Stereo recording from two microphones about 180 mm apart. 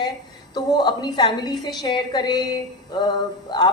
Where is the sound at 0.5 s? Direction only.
25° left (ahead or behind).